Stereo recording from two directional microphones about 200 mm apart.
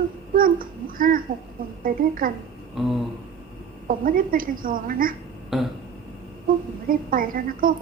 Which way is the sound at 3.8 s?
45° right (ahead or behind).